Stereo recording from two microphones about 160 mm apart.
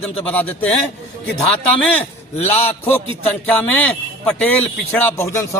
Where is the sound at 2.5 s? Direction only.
10° left (ahead or behind).